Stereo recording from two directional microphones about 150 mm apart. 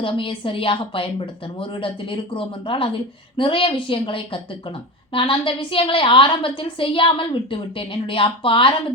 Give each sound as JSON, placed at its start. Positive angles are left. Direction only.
{"t": 0.0, "sound": "a woman's voice", "side_deg": 35}